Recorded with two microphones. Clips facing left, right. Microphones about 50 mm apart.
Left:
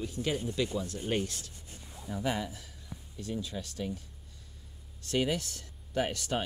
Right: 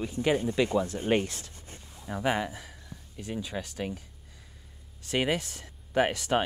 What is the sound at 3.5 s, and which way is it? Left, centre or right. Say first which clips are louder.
Speech: right 4 dB; right.